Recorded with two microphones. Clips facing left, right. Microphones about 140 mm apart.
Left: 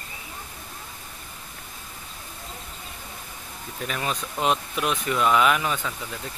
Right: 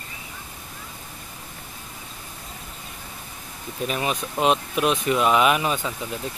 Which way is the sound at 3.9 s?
15° right (ahead or behind).